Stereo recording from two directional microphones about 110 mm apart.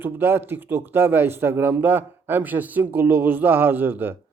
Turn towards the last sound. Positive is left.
turn(degrees=-20)  # may be behind; listen again after turning